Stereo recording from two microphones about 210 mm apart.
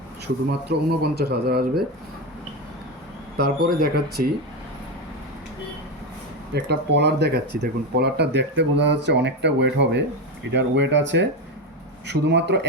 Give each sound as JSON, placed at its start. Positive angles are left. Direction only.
{"t": 0.7, "sound": "speech", "side_deg": -50}
{"t": 3.3, "sound": "speech", "side_deg": -50}
{"t": 6.5, "sound": "speech", "side_deg": -55}